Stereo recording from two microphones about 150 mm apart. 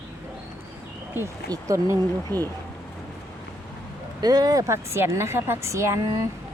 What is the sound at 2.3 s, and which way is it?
Speech, 10° left (ahead or behind).